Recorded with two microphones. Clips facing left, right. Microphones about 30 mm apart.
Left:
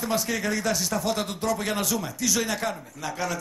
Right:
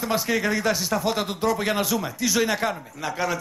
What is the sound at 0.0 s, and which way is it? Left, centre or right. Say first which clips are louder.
Speech: right 3 dB; centre.